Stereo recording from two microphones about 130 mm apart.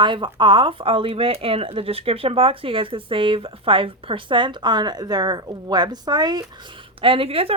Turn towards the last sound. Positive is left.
turn(degrees=-45)  # may be behind; listen again after turning